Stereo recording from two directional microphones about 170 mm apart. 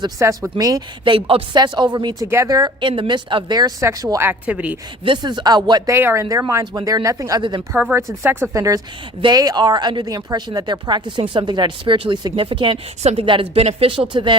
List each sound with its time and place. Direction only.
0.0 s speech: 20° right (ahead or behind)
5.0 s speech: 25° right (ahead or behind)
7.7 s speech: 10° right (ahead or behind); by 14.3 s 30° right (ahead or behind)